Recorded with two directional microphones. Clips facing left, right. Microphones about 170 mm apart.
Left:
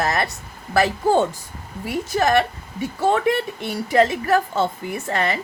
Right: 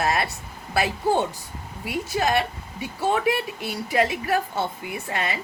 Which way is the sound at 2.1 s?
45° left (ahead or behind).